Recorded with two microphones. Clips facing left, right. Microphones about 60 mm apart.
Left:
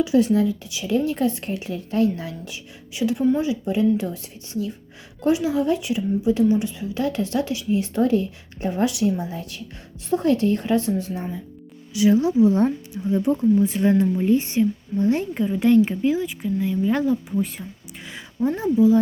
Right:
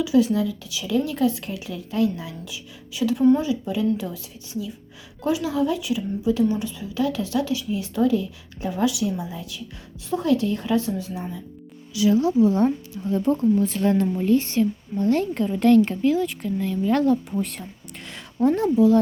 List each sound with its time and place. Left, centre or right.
0.0 s a woman's voice: left
2.9 s a woman's voice: left
5.4 s a woman's voice: left; by 17.2 s centre
18.4 s speech: centre